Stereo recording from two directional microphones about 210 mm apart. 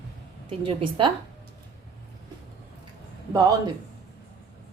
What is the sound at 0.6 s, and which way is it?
Speech, 25° right (ahead or behind).